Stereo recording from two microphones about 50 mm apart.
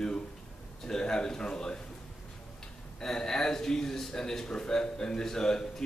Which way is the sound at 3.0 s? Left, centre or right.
Centre.